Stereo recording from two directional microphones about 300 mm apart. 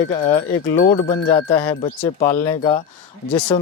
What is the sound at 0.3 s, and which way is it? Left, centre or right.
Speech, centre.